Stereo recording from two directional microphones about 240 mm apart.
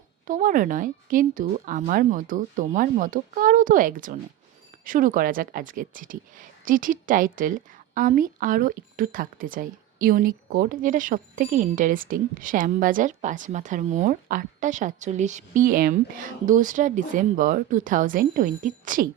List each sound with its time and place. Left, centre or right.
0.3 s a woman's voice: right